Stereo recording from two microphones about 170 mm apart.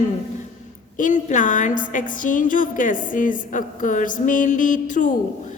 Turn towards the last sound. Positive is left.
turn(degrees=50)  # may be behind; listen again after turning